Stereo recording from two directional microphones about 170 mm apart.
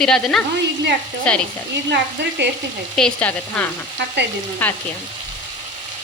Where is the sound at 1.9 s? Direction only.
85° right.